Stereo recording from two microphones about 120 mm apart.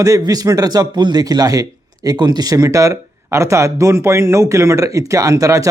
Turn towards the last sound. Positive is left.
turn(degrees=-25)  # may be behind; listen again after turning